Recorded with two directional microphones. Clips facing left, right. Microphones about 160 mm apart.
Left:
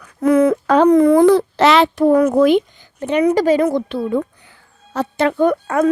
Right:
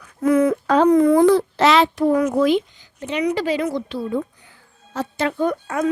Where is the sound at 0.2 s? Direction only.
75° left (ahead or behind).